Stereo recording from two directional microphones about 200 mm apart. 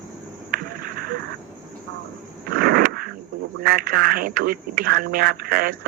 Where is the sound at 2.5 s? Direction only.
50° right (ahead or behind).